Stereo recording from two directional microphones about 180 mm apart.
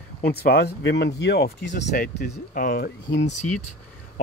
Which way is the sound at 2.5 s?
50° left (ahead or behind).